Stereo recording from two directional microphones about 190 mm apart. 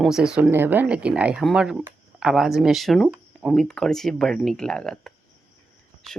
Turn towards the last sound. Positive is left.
turn(degrees=5)  # may be behind; listen again after turning